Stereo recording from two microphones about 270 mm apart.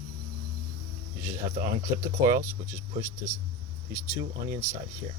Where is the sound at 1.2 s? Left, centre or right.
Right.